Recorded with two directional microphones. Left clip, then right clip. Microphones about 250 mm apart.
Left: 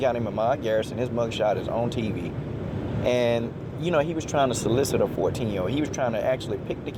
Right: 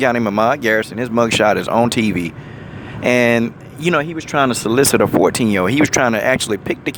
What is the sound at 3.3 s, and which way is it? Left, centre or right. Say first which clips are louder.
Speech: right 9 dB; right.